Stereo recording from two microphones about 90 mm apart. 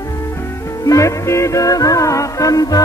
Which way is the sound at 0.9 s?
35° left (ahead or behind).